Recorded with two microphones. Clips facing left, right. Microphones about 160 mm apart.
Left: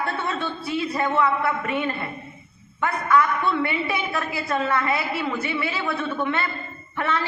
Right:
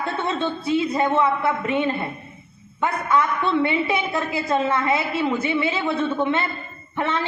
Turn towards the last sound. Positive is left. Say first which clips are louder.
# right 1 dB
turn(degrees=-20)  # may be behind; listen again after turning